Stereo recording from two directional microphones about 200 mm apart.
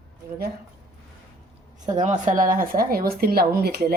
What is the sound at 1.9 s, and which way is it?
A woman's voice, 35° right (ahead or behind).